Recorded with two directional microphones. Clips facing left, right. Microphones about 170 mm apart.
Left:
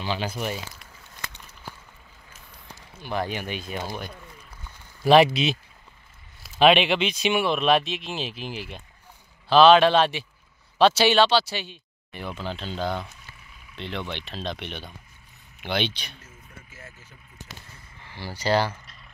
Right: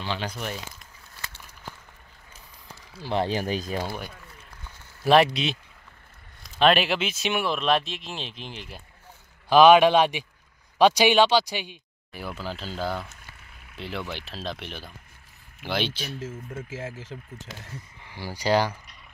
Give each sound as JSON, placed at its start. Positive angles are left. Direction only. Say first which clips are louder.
{"t": 0.0, "sound": "speech", "louder": "left 3 dB", "side_deg": 5}
{"t": 2.9, "sound": "speech", "louder": "right 3 dB", "side_deg": -30}
{"t": 5.0, "sound": "speech", "louder": "left 2 dB", "side_deg": 0}
{"t": 9.5, "sound": "speech", "louder": "even", "side_deg": -15}
{"t": 16.5, "sound": "speech", "louder": "right 12 dB", "side_deg": -90}
{"t": 18.0, "sound": "speech", "louder": "even", "side_deg": -15}